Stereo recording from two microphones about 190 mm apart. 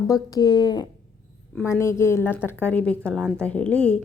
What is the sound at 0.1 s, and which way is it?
A woman's voice, 20° left (ahead or behind).